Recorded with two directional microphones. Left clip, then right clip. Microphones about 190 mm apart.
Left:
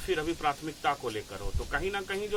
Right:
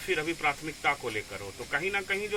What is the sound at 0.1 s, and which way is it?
Speech, 5° left (ahead or behind).